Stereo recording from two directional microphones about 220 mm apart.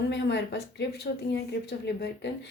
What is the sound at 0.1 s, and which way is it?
Speech, 50° left (ahead or behind).